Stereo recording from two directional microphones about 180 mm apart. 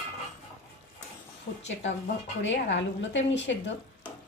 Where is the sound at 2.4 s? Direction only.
90° left.